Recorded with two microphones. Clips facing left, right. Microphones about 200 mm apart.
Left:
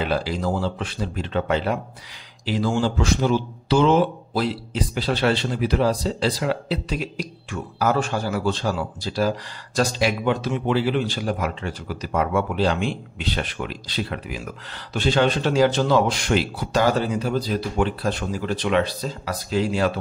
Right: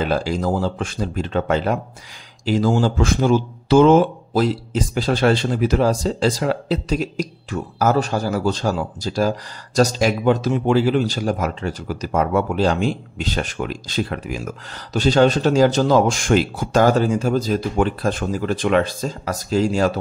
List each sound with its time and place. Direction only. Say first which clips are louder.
0.0 s speech: right 3 dB; 45° right (ahead or behind)